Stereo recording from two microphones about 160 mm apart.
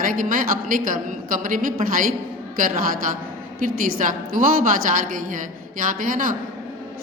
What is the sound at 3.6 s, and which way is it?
A woman's voice, 55° right (ahead or behind).